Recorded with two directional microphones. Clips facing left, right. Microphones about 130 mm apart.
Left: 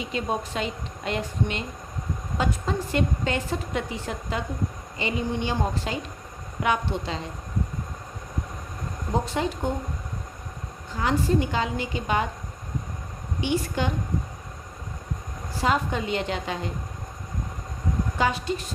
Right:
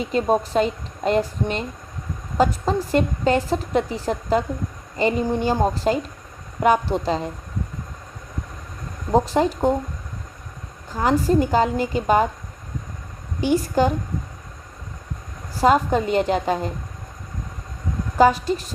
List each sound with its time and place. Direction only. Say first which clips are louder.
0.0 s a woman's voice: right 8 dB; 40° right (ahead or behind)
9.1 s a woman's voice: right 8 dB; 40° right (ahead or behind)
10.9 s a woman's voice: right 5 dB; 40° right (ahead or behind)
13.4 s a woman's voice: right 7 dB; 40° right (ahead or behind)
15.5 s a woman's voice: right 8 dB; 40° right (ahead or behind)
18.2 s a woman's voice: right 10 dB; 40° right (ahead or behind)